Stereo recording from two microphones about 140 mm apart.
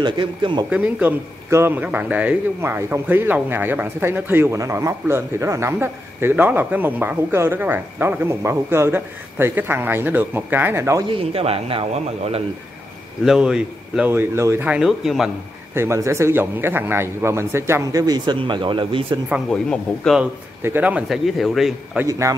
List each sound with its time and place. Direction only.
0.0 s speech: 35° right (ahead or behind)
0.7 s a man's voice: 10° right (ahead or behind)
11.1 s a man's voice: 40° right (ahead or behind)
13.2 s a man's voice: 5° right (ahead or behind)
14.8 s speech: centre (ahead or behind)
15.7 s a man's voice: 20° right (ahead or behind); by 19.1 s 35° right (ahead or behind)
19.5 s speech: 5° left (ahead or behind)
20.2 s a man's voice: 10° right (ahead or behind)